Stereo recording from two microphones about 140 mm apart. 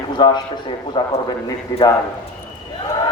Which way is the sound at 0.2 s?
30° left (ahead or behind).